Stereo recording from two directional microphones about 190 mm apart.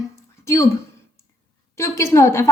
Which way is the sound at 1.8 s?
15° left (ahead or behind).